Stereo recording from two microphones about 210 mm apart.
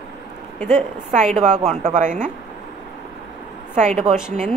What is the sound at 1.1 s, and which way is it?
A woman's voice, 35° right (ahead or behind).